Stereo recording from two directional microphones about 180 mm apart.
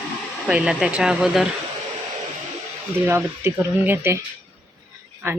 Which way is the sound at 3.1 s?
10° right (ahead or behind).